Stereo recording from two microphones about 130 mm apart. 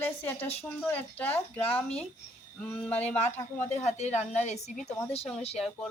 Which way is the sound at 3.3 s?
60° left (ahead or behind).